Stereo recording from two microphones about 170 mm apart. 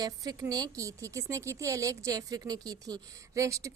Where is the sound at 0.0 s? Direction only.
20° right (ahead or behind).